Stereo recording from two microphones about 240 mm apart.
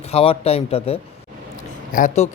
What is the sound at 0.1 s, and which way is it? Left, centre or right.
Speech, left.